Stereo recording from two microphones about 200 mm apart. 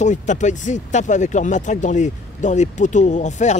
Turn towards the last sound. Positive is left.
turn(degrees=35)  # may be behind; listen again after turning